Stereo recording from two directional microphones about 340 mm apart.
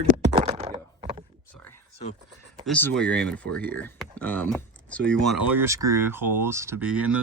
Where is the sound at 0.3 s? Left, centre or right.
Centre.